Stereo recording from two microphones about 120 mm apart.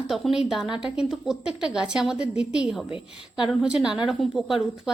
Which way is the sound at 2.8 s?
45° left (ahead or behind).